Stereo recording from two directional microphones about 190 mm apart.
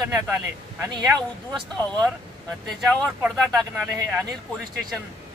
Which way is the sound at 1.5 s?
Centre (ahead or behind).